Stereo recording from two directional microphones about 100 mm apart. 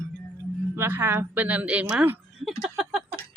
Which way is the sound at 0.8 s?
25° right (ahead or behind).